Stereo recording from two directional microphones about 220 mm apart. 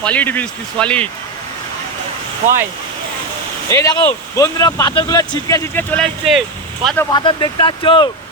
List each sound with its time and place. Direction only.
0.0 s speech: 5° left (ahead or behind)
3.7 s speech: 10° left (ahead or behind)